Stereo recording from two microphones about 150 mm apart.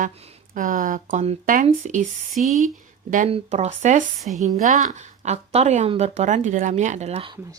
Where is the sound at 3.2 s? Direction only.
45° right (ahead or behind).